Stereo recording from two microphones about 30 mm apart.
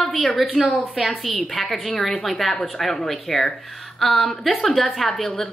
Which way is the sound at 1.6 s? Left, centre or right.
Centre.